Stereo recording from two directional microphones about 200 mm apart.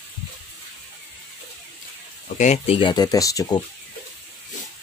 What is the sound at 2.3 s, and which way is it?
Speech, 35° left (ahead or behind).